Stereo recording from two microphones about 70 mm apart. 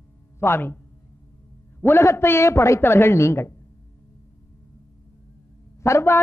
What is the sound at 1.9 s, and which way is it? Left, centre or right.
A man's voice, left.